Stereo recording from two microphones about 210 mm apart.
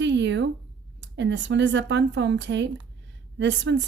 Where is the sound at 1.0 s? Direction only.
55° right (ahead or behind).